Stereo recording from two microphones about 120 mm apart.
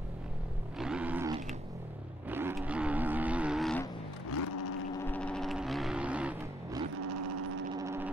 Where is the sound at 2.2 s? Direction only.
15° right (ahead or behind).